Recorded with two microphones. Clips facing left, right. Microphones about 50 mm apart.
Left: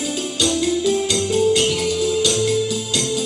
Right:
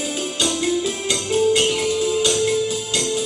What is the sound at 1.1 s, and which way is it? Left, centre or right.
Music, right.